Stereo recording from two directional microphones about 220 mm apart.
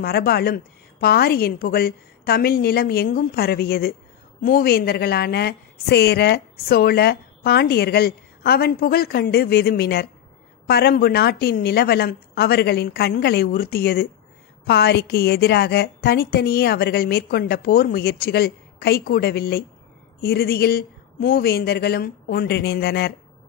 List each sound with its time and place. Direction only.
0.0 s a woman's voice: 45° left (ahead or behind)